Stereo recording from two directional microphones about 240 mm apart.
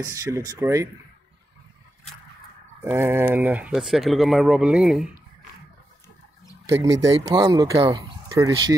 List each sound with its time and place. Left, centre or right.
0.0 s speech: centre
2.8 s speech: centre
6.6 s speech: centre
6.9 s speech: right
7.2 s speech: centre